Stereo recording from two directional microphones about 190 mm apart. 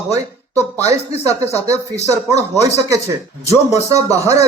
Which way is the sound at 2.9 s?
15° right (ahead or behind).